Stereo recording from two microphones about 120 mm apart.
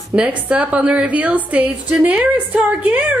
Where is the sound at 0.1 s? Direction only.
10° right (ahead or behind).